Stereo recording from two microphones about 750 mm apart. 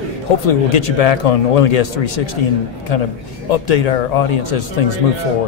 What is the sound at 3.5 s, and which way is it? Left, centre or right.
Speech, left.